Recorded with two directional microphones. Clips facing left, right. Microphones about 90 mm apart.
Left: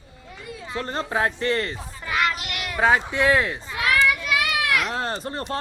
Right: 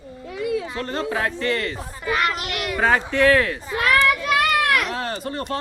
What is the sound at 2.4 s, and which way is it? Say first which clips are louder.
A child's voice: left 1 dB; 5° left (ahead or behind).